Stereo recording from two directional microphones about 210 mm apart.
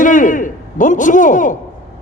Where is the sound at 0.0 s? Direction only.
40° left (ahead or behind).